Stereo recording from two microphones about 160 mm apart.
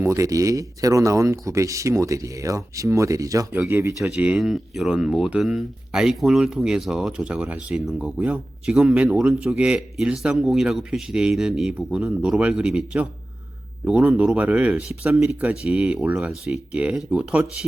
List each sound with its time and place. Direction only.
0.0 s speech: 20° right (ahead or behind)
4.0 s speech: 5° right (ahead or behind)